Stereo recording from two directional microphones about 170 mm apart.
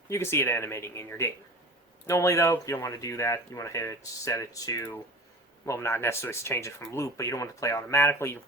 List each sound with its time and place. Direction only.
0.1 s speech: 15° left (ahead or behind)